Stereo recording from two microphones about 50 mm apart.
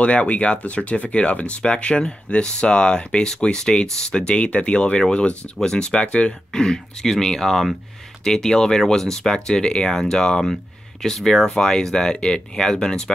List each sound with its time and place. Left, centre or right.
0.0 s speech: left